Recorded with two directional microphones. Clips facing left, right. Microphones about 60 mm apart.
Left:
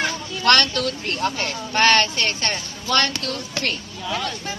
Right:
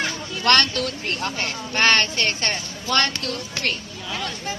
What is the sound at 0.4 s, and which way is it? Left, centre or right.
Speech, centre.